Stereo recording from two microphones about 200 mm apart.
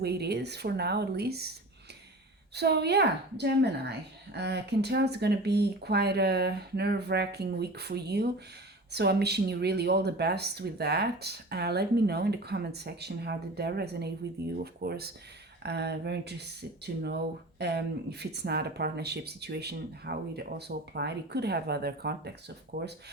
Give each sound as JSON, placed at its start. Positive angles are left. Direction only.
{"t": 0.0, "sound": "a woman's voice", "side_deg": -55}
{"t": 2.6, "sound": "a woman's voice", "side_deg": -55}